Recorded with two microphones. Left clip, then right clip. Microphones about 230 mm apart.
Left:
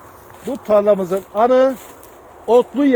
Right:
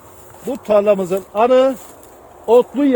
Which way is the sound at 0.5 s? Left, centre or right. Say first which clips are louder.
Even; right.